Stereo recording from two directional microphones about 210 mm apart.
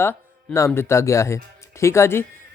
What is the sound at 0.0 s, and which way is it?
Speech, 10° left (ahead or behind).